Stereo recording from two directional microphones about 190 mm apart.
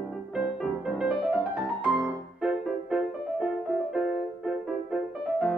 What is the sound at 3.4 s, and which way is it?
Music, 5° right (ahead or behind).